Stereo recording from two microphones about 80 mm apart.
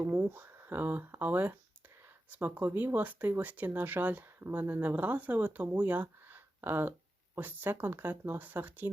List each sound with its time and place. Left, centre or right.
0.0 s speech: right